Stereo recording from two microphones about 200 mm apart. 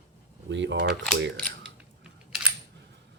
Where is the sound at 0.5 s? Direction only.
65° right (ahead or behind).